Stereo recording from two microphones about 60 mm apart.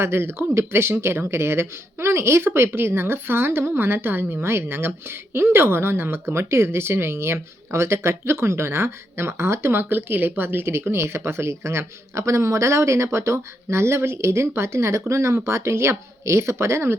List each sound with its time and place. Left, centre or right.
0.0 s speech: right